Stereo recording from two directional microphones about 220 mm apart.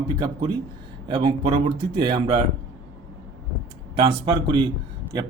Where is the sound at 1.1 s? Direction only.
25° right (ahead or behind).